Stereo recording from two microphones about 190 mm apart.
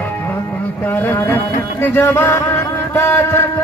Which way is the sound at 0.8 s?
10° left (ahead or behind).